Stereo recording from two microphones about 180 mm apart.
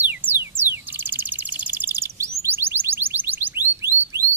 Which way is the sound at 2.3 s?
15° right (ahead or behind).